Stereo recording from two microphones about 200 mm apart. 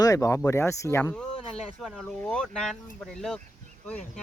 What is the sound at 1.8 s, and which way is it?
Speech, centre (ahead or behind).